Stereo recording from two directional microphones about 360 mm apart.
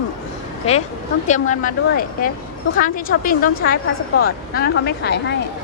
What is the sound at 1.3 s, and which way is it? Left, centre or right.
Speech, left.